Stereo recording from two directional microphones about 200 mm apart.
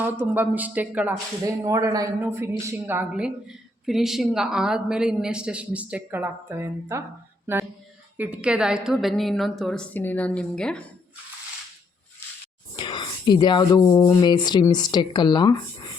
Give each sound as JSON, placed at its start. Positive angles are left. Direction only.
{"t": 0.0, "sound": "speech", "side_deg": -10}
{"t": 8.1, "sound": "a woman's voice", "side_deg": -10}
{"t": 12.7, "sound": "speech", "side_deg": 25}